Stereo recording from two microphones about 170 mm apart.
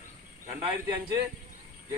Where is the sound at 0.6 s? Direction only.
15° right (ahead or behind).